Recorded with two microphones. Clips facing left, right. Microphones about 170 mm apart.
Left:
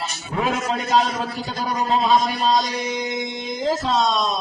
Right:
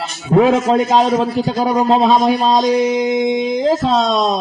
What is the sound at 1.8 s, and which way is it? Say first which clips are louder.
Speech: right 5 dB; 55° right (ahead or behind).